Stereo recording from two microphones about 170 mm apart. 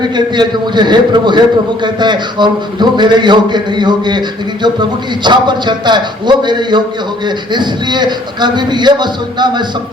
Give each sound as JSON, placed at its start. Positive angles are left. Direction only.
{"t": 0.3, "sound": "a man's voice", "side_deg": -25}